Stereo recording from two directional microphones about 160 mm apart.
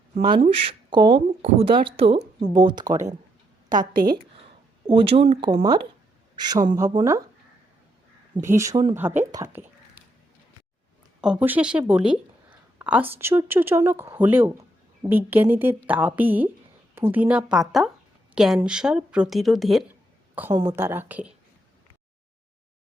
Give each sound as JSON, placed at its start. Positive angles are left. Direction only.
{"t": 0.2, "sound": "speech", "side_deg": -30}
{"t": 3.7, "sound": "a woman's voice", "side_deg": -60}
{"t": 4.9, "sound": "speech", "side_deg": -35}
{"t": 5.5, "sound": "speech", "side_deg": -25}
{"t": 8.4, "sound": "speech", "side_deg": -20}
{"t": 9.0, "sound": "speech", "side_deg": -10}
{"t": 11.2, "sound": "a woman's voice", "side_deg": -5}
{"t": 20.5, "sound": "speech", "side_deg": -25}
{"t": 20.7, "sound": "speech", "side_deg": -15}